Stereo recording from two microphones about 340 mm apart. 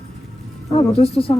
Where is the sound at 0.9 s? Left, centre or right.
Centre.